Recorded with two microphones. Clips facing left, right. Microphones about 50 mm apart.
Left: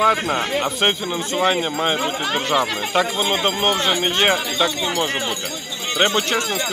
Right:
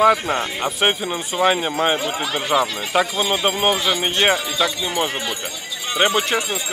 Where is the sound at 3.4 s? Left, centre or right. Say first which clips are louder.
Right 1 dB; centre.